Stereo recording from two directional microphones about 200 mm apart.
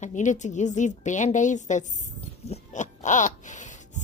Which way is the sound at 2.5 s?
35° left (ahead or behind).